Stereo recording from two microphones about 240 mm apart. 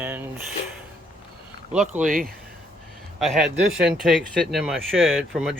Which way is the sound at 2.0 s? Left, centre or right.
Right.